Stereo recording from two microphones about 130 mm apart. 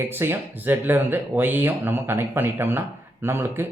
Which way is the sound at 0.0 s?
15° right (ahead or behind).